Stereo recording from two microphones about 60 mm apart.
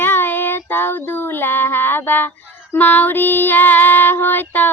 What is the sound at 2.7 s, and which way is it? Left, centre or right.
Female singing, left.